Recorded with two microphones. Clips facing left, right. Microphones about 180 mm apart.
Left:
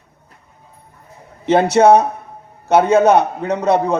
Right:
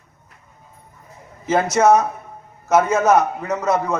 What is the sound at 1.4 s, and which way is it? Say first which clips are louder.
Speech: left 4 dB; 30° left (ahead or behind).